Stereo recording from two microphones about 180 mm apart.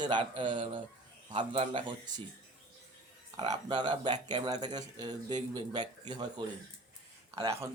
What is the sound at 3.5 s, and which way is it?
Speech, 25° right (ahead or behind).